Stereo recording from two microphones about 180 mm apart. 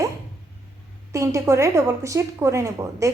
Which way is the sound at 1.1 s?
15° right (ahead or behind).